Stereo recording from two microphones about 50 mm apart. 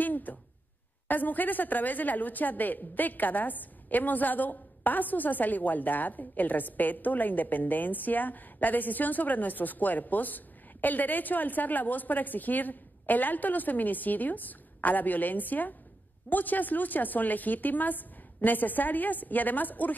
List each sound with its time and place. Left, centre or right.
0.0 s a woman's voice: left